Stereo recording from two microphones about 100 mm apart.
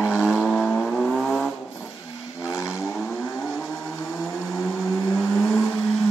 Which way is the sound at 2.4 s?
30° left (ahead or behind).